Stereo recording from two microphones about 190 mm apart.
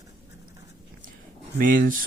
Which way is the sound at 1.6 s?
45° right (ahead or behind).